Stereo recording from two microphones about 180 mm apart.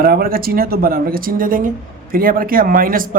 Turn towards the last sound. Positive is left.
turn(degrees=-50)  # may be behind; listen again after turning